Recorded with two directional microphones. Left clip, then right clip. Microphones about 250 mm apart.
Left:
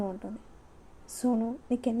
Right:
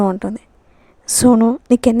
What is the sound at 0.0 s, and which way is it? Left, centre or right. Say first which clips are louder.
A woman's voice: right 17 dB; right.